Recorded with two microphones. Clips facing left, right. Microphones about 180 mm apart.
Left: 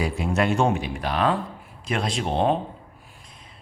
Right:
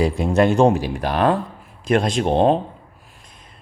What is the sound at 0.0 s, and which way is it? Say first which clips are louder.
Speech: right 7 dB; 35° right (ahead or behind).